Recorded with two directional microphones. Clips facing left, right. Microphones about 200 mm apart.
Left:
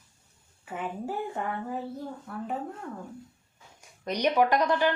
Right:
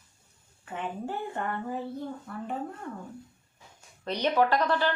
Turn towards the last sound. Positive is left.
turn(degrees=15)  # may be behind; listen again after turning